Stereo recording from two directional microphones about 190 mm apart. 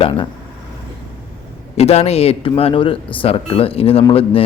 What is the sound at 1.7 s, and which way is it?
A man's voice, 35° left (ahead or behind).